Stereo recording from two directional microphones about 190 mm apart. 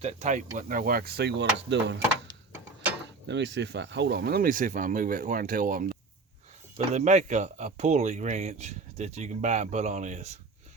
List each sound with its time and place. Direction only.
0.0 s speech: 35° right (ahead or behind); by 2.0 s 65° right (ahead or behind)
3.2 s speech: 65° right (ahead or behind); by 10.2 s 40° right (ahead or behind)